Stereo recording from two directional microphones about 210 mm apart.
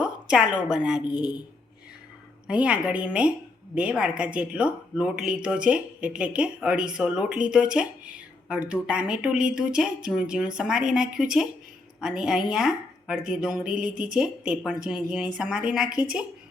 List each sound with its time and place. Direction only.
0.0 s a woman's voice: 5° right (ahead or behind)
1.1 s speech: 20° left (ahead or behind)
2.5 s speech: 5° right (ahead or behind)